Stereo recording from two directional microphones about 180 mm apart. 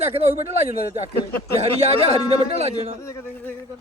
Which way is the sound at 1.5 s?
35° right (ahead or behind).